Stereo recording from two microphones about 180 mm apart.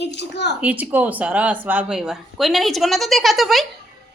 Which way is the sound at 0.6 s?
10° right (ahead or behind).